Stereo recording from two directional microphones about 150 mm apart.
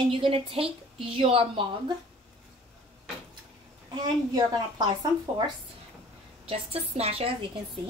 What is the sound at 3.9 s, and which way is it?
A woman's voice, 25° right (ahead or behind).